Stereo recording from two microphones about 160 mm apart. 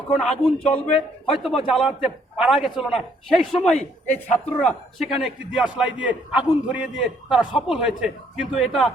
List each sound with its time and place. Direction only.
0.1 s speech: centre (ahead or behind)
0.7 s a man's voice: 35° left (ahead or behind)
1.4 s speech: centre (ahead or behind)